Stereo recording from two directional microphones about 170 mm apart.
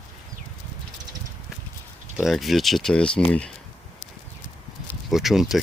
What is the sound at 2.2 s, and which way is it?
Speech, centre (ahead or behind).